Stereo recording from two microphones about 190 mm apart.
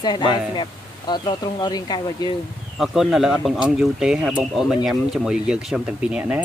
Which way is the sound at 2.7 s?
Centre (ahead or behind).